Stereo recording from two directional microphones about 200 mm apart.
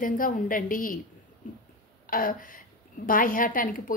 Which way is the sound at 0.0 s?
45° left (ahead or behind).